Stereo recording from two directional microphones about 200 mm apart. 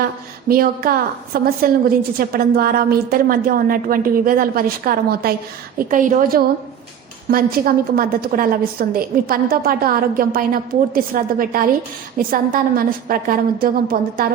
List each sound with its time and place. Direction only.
0.4 s a woman's voice: 45° right (ahead or behind)